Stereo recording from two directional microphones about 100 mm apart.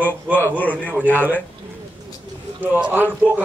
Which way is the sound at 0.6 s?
15° left (ahead or behind).